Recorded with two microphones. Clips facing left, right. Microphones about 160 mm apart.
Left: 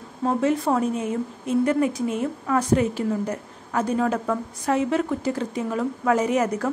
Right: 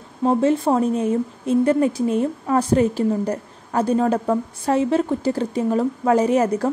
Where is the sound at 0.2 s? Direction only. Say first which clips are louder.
Right 4 dB; 30° right (ahead or behind).